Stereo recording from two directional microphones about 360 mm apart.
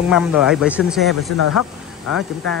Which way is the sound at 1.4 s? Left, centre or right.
Left.